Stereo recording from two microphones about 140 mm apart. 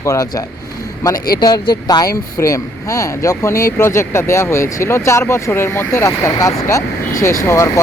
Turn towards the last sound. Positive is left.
turn(degrees=20)  # may be behind; listen again after turning